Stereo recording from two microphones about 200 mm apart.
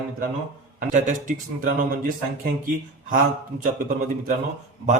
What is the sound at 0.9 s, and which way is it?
A man's voice, 40° right (ahead or behind).